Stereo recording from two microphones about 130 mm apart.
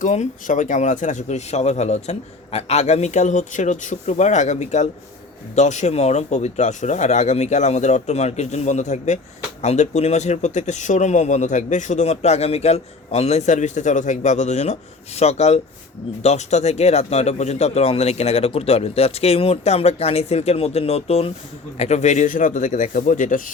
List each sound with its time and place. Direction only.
0.0 s speech: 70° left (ahead or behind)